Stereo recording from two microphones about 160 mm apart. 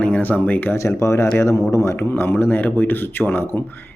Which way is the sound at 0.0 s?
10° left (ahead or behind).